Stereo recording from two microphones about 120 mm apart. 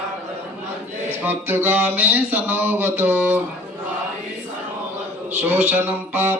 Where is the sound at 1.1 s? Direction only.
15° right (ahead or behind).